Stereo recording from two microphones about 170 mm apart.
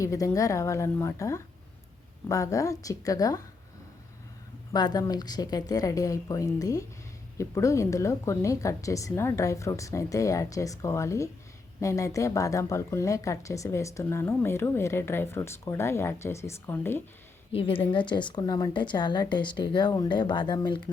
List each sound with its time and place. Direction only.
0.0 s a woman's voice: 20° left (ahead or behind)
4.7 s a woman's voice: 25° left (ahead or behind)
17.5 s a woman's voice: 30° left (ahead or behind)